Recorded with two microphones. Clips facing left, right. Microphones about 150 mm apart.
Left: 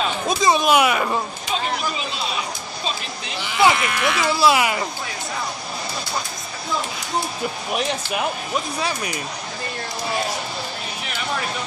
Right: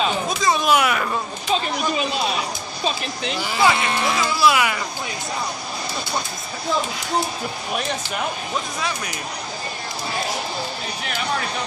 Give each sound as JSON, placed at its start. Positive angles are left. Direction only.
{"t": 0.4, "sound": "speech", "side_deg": 20}
{"t": 3.3, "sound": "speech", "side_deg": -40}
{"t": 3.7, "sound": "speech", "side_deg": -30}
{"t": 4.4, "sound": "speech", "side_deg": 25}